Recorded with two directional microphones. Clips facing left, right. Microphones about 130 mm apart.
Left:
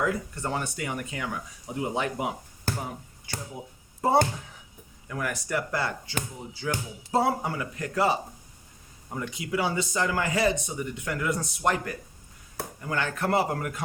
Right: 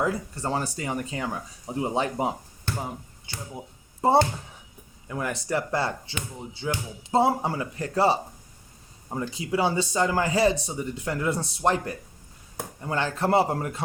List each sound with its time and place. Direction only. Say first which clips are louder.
0.0 s speech: right 1 dB; 30° right (ahead or behind)
4.0 s speech: right 2 dB; 25° right (ahead or behind)